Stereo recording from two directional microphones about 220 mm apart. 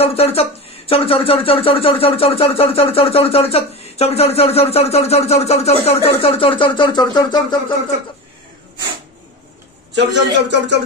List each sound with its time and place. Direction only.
0.0 s speech: 25° left (ahead or behind)
9.9 s speech: 50° right (ahead or behind)